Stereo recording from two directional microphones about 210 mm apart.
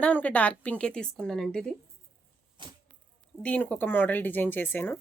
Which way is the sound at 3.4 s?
5° left (ahead or behind).